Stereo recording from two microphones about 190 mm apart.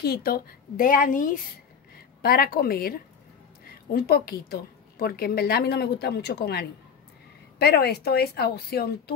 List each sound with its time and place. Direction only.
0.0 s a woman's voice: 55° left (ahead or behind)